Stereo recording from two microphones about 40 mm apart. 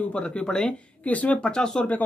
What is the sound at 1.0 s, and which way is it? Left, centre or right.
Speech, left.